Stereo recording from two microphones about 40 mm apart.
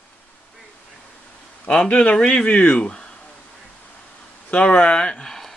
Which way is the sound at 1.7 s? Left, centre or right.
Left.